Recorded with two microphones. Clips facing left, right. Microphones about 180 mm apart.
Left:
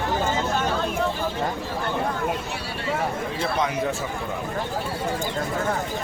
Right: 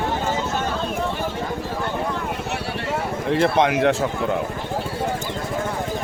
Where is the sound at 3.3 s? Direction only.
70° right (ahead or behind).